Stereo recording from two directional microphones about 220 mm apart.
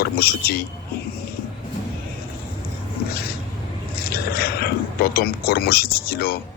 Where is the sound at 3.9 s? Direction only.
45° left (ahead or behind).